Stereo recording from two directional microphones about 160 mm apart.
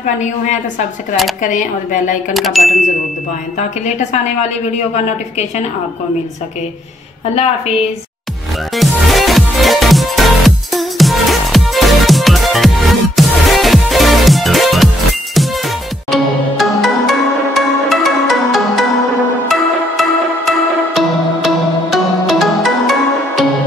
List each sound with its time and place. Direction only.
0.0 s a woman's voice: 50° left (ahead or behind)
2.3 s speech: centre (ahead or behind)
3.5 s a woman's voice: 45° left (ahead or behind)
7.3 s a woman's voice: 40° left (ahead or behind)
8.7 s music: centre (ahead or behind)
16.1 s music: centre (ahead or behind)